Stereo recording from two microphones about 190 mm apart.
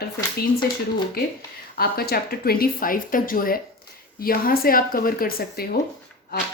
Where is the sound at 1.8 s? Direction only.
55° left (ahead or behind).